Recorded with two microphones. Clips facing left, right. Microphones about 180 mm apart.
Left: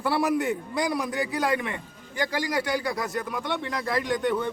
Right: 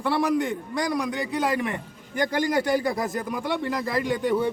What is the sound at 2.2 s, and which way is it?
Speech, 50° right (ahead or behind).